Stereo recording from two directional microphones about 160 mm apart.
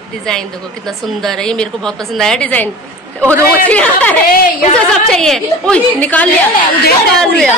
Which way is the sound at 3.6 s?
10° left (ahead or behind).